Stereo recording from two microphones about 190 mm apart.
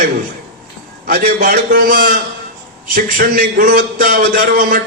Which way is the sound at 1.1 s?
50° right (ahead or behind).